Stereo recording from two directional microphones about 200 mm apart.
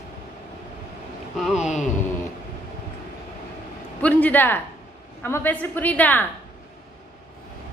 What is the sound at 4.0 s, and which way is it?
A woman's voice, 10° left (ahead or behind).